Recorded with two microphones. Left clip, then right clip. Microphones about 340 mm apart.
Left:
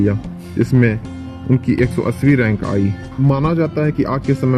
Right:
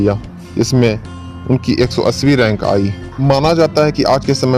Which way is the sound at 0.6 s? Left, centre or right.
Right.